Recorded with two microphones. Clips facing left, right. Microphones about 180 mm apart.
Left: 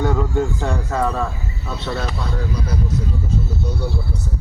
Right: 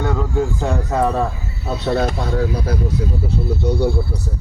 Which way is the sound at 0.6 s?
20° right (ahead or behind).